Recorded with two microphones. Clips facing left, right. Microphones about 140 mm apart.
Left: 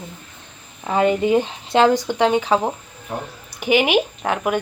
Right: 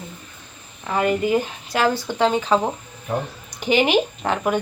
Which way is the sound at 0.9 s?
25° left (ahead or behind).